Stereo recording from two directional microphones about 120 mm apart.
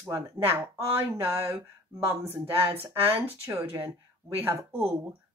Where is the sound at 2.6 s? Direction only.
55° right (ahead or behind).